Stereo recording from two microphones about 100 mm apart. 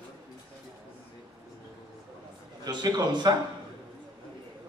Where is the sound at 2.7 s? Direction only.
45° right (ahead or behind).